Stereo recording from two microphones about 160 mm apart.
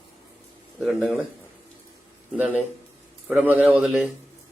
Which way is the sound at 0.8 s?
Centre (ahead or behind).